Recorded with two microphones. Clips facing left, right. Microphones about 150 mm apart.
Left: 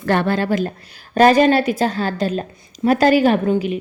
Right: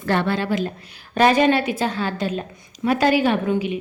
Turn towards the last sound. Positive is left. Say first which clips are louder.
# left 4 dB
turn(degrees=40)  # may be behind; listen again after turning